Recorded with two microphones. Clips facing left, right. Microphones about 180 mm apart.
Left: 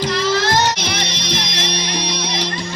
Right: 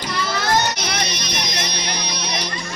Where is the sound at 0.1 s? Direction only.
90° left.